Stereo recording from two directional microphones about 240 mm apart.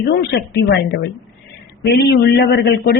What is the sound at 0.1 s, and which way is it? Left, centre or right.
A man's voice, left.